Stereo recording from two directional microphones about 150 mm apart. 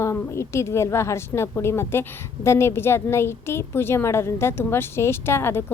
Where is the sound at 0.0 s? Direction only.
20° left (ahead or behind).